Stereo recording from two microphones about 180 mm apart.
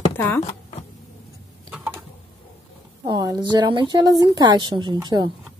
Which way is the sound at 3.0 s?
20° right (ahead or behind).